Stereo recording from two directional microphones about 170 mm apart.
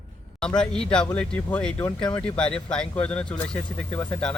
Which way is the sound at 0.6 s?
5° left (ahead or behind).